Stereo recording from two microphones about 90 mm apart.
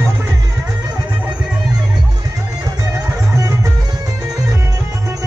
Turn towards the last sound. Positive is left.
turn(degrees=-35)  # may be behind; listen again after turning